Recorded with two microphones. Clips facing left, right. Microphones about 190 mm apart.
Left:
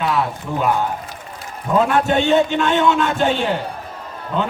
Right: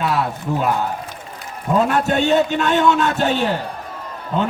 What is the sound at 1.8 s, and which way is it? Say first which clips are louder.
A man's voice: left 2 dB; 40° right (ahead or behind).